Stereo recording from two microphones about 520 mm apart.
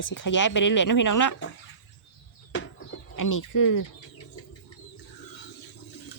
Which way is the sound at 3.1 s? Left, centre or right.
Left.